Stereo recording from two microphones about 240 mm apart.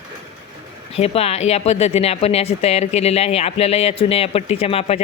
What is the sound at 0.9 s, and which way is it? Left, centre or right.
Speech, left.